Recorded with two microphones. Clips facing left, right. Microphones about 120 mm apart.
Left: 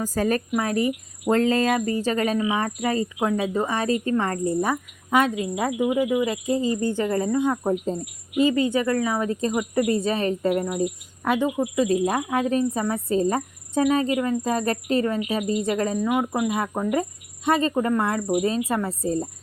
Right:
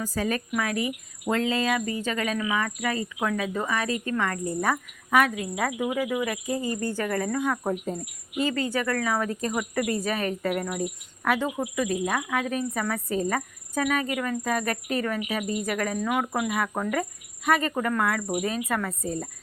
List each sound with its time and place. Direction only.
0.0 s speech: 45° left (ahead or behind)
4.6 s cricket: 20° left (ahead or behind)
11.8 s speech: 30° left (ahead or behind)
12.8 s cricket: 25° left (ahead or behind)
16.0 s speech: 15° left (ahead or behind)
16.6 s cricket: 20° left (ahead or behind)